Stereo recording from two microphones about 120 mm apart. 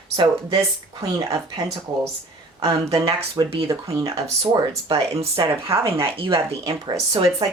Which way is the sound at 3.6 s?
25° right (ahead or behind).